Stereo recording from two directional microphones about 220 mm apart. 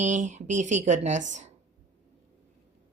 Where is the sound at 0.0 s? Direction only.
35° right (ahead or behind).